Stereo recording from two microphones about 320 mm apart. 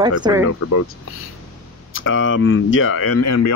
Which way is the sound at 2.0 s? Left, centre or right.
Left.